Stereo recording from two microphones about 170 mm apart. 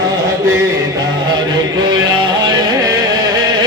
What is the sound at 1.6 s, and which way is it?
Music, 25° right (ahead or behind).